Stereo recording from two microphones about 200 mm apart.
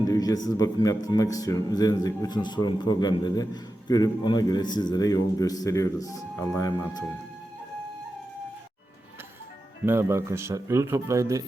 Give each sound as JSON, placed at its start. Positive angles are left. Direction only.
{"t": 0.0, "sound": "speech", "side_deg": 20}
{"t": 9.8, "sound": "speech", "side_deg": -10}